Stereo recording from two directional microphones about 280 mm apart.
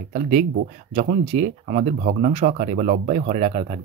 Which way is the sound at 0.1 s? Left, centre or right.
Right.